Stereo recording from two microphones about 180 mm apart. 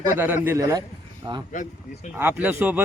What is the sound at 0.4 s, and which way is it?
Speech, 20° right (ahead or behind).